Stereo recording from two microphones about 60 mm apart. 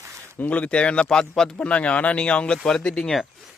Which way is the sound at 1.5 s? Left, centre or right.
Left.